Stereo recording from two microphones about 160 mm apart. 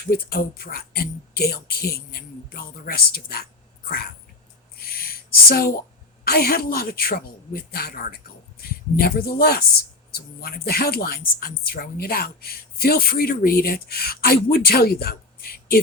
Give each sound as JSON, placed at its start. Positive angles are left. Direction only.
{"t": 0.1, "sound": "speech", "side_deg": 70}
{"t": 4.8, "sound": "a sound", "side_deg": 70}
{"t": 6.2, "sound": "speech", "side_deg": 70}